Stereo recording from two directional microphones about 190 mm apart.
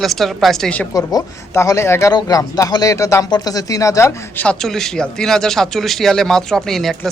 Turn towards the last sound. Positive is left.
turn(degrees=0)  # may be behind; listen again after turning